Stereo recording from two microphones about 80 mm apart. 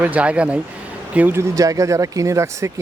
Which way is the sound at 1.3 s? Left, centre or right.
Right.